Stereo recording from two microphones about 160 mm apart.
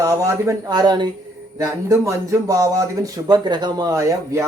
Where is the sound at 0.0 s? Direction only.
20° right (ahead or behind).